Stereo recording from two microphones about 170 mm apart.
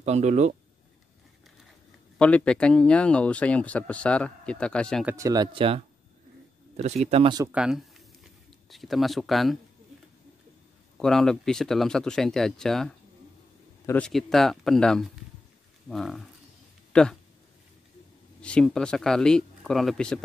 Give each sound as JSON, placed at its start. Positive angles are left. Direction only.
{"t": 0.0, "sound": "speech", "side_deg": -40}
{"t": 2.1, "sound": "speech", "side_deg": 5}
{"t": 5.0, "sound": "speech", "side_deg": -20}
{"t": 6.8, "sound": "speech", "side_deg": -40}
{"t": 7.5, "sound": "a sound", "side_deg": -5}
{"t": 11.0, "sound": "speech", "side_deg": 5}
{"t": 18.4, "sound": "speech", "side_deg": 5}